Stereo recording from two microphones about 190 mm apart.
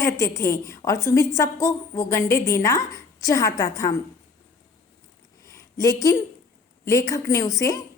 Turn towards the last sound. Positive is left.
turn(degrees=15)  # may be behind; listen again after turning